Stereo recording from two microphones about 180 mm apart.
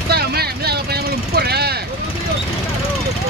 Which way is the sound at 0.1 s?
60° right (ahead or behind).